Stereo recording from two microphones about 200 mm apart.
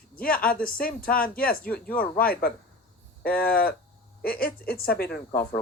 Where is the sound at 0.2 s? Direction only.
45° left (ahead or behind).